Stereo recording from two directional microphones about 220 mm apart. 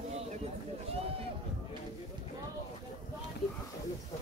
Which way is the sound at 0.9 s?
25° right (ahead or behind).